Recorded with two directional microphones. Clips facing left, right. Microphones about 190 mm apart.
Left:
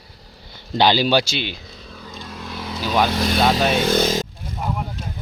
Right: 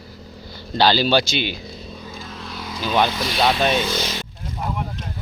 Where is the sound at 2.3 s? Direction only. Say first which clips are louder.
Left 4 dB; 10° left (ahead or behind).